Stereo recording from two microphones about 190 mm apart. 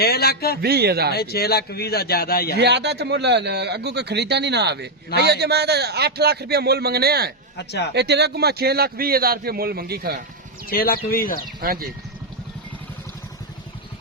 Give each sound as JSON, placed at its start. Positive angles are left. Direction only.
{"t": 0.0, "sound": "a man's voice", "side_deg": 55}
{"t": 0.6, "sound": "a man's voice", "side_deg": -55}
{"t": 1.1, "sound": "a man's voice", "side_deg": 55}
{"t": 2.6, "sound": "a man's voice", "side_deg": -60}
{"t": 7.5, "sound": "speech", "side_deg": 60}
{"t": 7.9, "sound": "a man's voice", "side_deg": -60}
{"t": 10.7, "sound": "speech", "side_deg": 50}
{"t": 11.6, "sound": "speech", "side_deg": -50}